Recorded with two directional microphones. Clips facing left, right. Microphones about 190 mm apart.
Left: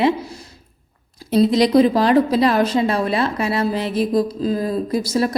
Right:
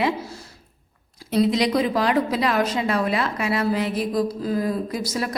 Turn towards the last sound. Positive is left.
turn(degrees=30)  # may be behind; listen again after turning